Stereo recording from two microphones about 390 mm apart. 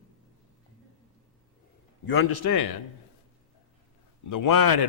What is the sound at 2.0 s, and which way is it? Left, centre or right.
Speech, left.